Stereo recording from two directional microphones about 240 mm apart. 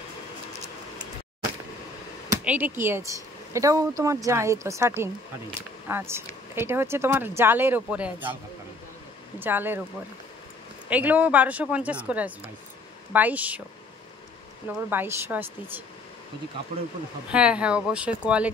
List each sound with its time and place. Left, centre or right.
2.3 s speech: centre
9.4 s speech: centre
10.9 s a woman's voice: centre
14.7 s speech: centre
16.7 s speech: right
17.3 s a woman's voice: centre